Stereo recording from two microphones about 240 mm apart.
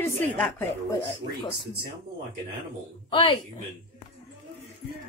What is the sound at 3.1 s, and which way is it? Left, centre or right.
Speech, left.